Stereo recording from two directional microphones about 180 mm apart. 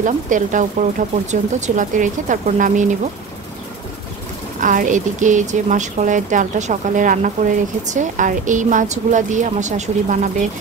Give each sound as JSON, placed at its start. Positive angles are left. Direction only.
{"t": 0.0, "sound": "speech", "side_deg": -45}
{"t": 4.6, "sound": "speech", "side_deg": -45}